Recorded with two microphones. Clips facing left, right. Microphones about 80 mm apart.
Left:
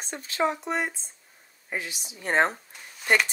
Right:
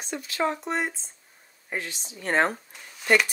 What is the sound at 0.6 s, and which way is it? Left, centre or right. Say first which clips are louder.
Speech: even; centre.